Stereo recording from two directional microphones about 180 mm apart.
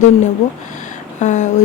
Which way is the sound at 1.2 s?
40° left (ahead or behind).